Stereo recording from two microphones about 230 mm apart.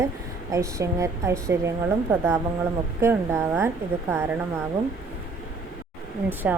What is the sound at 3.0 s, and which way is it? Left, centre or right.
Speech, centre.